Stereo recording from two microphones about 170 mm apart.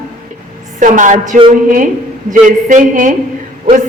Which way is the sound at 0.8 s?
50° right (ahead or behind).